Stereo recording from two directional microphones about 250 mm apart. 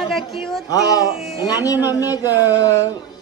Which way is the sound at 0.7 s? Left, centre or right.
Centre.